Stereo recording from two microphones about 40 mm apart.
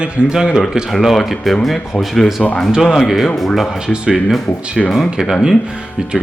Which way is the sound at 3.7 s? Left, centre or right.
Centre.